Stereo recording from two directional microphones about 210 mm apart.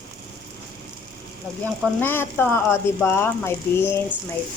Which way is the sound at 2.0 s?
10° left (ahead or behind).